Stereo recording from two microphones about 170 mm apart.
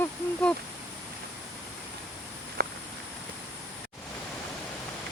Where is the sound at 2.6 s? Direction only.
65° right (ahead or behind).